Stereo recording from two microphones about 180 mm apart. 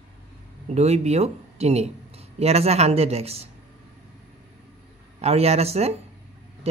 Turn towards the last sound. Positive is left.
turn(degrees=-35)  # may be behind; listen again after turning